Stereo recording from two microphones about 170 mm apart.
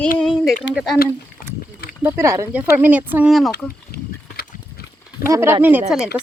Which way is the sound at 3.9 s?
65° left (ahead or behind).